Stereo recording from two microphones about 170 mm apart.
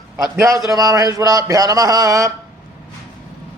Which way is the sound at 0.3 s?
20° right (ahead or behind).